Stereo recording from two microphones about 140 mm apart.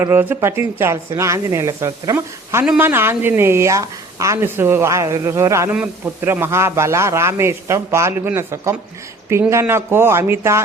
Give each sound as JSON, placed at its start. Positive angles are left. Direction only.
{"t": 0.0, "sound": "a man's voice", "side_deg": -15}